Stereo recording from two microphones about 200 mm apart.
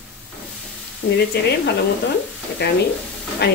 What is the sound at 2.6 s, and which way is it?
Speech, 60° left (ahead or behind).